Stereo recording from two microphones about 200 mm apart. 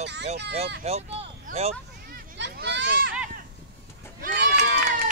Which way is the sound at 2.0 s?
55° right (ahead or behind).